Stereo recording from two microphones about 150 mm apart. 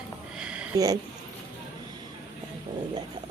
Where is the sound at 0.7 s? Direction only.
25° right (ahead or behind).